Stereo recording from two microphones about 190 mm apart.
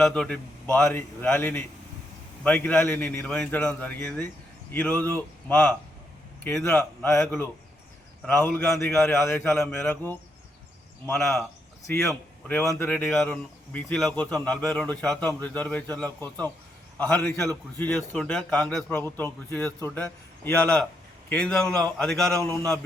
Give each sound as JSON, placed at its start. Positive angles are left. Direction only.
{"t": 0.0, "sound": "a man's voice", "side_deg": 5}